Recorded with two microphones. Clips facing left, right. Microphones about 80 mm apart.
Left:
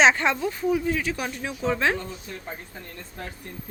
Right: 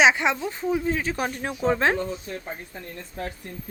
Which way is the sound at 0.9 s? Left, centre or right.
Right.